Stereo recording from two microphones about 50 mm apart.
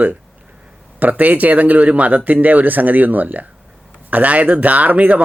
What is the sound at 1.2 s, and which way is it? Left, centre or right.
Speech, right.